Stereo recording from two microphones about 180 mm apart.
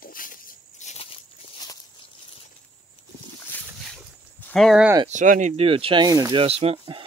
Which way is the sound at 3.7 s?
Centre (ahead or behind).